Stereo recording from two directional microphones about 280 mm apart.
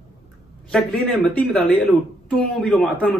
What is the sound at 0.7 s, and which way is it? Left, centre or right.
Speech, centre.